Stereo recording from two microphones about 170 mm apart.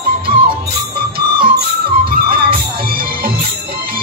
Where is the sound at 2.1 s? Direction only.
60° right (ahead or behind).